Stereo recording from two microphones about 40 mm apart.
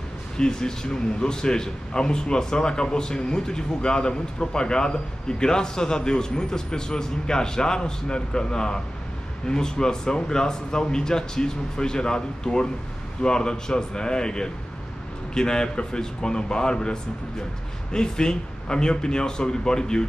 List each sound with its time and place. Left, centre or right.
0.4 s a man's voice: centre